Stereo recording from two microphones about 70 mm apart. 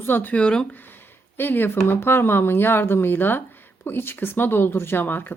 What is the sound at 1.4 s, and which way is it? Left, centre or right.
Speech, left.